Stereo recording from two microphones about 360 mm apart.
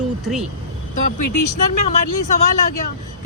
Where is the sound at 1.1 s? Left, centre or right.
Left.